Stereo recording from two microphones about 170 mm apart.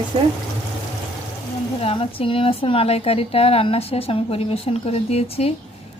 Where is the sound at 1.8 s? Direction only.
35° left (ahead or behind).